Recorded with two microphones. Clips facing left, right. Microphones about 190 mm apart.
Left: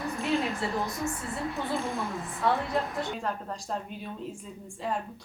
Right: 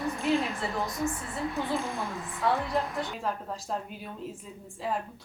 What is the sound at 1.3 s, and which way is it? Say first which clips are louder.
Speech: right 1 dB; centre (ahead or behind).